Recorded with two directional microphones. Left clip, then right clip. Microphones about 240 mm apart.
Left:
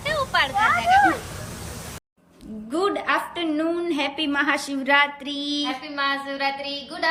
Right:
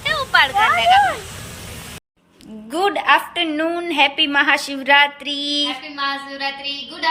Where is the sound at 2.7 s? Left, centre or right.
Centre.